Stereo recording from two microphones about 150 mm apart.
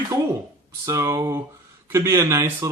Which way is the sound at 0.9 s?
20° right (ahead or behind).